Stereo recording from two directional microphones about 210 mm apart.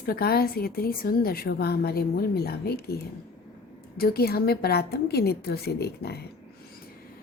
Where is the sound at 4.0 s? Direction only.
45° left (ahead or behind).